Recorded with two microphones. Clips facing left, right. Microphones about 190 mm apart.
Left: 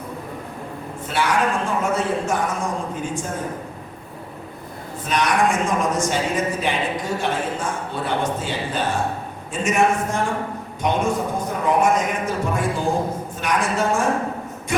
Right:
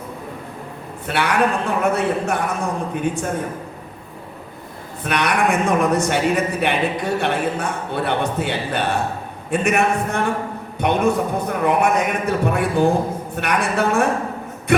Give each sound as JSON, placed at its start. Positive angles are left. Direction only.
{"t": 1.0, "sound": "a man's voice", "side_deg": -65}
{"t": 5.0, "sound": "a man's voice", "side_deg": -65}
{"t": 14.7, "sound": "a sound", "side_deg": -65}